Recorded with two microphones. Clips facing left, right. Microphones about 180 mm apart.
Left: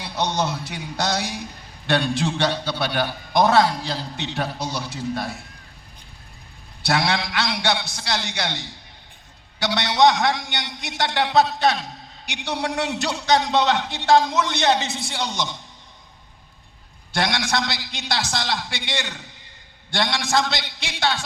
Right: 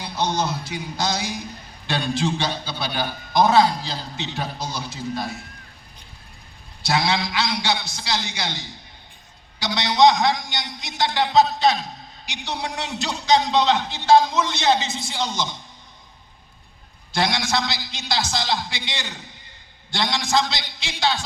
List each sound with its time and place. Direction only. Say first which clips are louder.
0.0 s a man's voice: even; 65° left (ahead or behind)
6.8 s a man's voice: even; 60° left (ahead or behind)
9.7 s a man's voice: right 1 dB; 60° left (ahead or behind)
17.2 s a man's voice: even; 65° left (ahead or behind)